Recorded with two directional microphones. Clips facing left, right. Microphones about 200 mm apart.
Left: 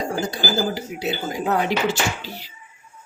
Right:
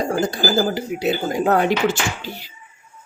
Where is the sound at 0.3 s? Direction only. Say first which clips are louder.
Right 4 dB; 55° right (ahead or behind).